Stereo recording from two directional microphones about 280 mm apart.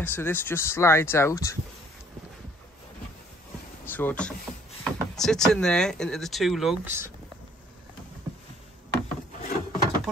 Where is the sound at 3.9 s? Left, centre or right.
Centre.